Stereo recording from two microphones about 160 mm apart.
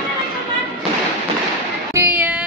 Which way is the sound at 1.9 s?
10° right (ahead or behind).